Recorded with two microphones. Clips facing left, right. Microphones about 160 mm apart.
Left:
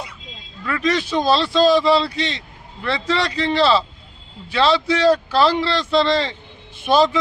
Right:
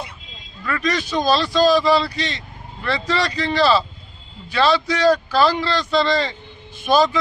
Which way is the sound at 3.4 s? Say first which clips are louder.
Left 1 dB; 20° left (ahead or behind).